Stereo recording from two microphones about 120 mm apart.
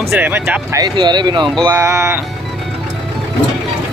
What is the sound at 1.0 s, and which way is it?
Speech, 40° right (ahead or behind).